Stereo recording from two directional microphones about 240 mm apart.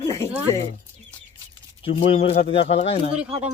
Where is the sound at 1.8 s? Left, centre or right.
Left.